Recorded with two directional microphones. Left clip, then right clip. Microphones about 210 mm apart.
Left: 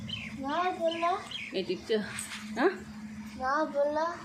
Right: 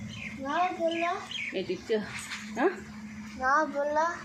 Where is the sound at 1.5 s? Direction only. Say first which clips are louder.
Left 1 dB; centre (ahead or behind).